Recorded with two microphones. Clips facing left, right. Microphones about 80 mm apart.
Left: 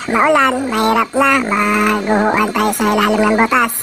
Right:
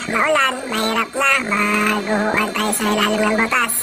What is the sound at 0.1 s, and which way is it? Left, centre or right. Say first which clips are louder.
A woman's voice: left 5 dB; left.